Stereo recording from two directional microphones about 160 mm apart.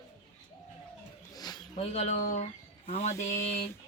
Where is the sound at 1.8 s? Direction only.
45° left (ahead or behind).